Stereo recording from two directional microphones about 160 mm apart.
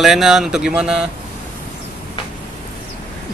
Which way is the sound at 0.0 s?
Centre (ahead or behind).